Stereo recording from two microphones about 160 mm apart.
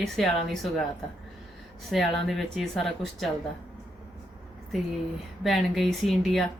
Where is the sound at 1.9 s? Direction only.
Centre (ahead or behind).